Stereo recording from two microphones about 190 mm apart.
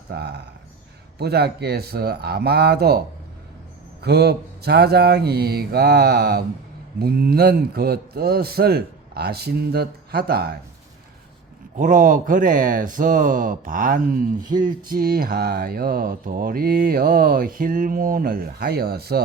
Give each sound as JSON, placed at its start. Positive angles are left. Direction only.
{"t": 0.1, "sound": "a man's voice", "side_deg": -60}
{"t": 4.0, "sound": "a man's voice", "side_deg": -55}
{"t": 11.8, "sound": "speech", "side_deg": -45}